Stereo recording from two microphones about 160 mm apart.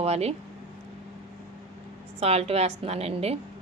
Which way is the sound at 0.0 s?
40° right (ahead or behind).